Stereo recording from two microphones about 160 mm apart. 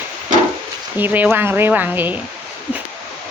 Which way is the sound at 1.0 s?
10° right (ahead or behind).